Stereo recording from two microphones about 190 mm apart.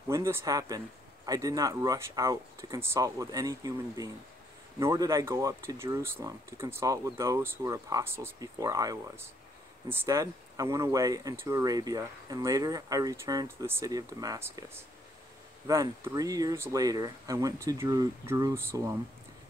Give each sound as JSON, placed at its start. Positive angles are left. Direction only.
{"t": 0.1, "sound": "speech", "side_deg": -15}
{"t": 15.6, "sound": "speech", "side_deg": -20}